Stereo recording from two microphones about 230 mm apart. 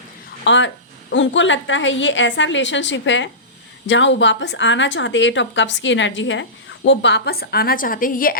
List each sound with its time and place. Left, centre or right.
0.4 s a woman's voice: left